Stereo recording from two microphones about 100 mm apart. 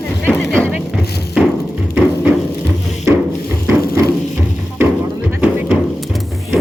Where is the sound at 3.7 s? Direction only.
30° right (ahead or behind).